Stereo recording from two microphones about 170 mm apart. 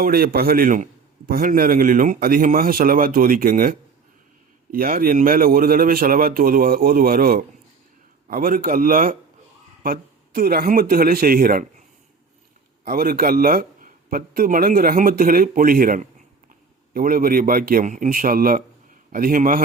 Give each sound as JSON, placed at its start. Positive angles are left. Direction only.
{"t": 0.0, "sound": "speech", "side_deg": -60}
{"t": 12.8, "sound": "a man's voice", "side_deg": -60}